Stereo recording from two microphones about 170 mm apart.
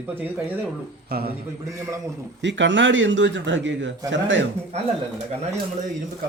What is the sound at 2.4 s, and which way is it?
Speech, 90° right.